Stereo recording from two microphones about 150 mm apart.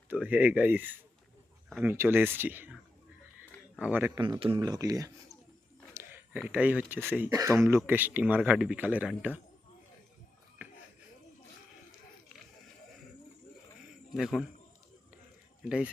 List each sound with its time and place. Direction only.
0.1 s speech: 10° right (ahead or behind)
3.8 s speech: 10° right (ahead or behind)
4.1 s speech: 30° right (ahead or behind)
5.9 s a sound: 20° right (ahead or behind)
6.4 s speech: 10° right (ahead or behind)
14.1 s speech: centre (ahead or behind)